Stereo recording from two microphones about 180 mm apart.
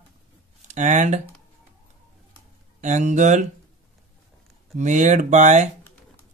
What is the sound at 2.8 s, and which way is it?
Speech, 40° right (ahead or behind).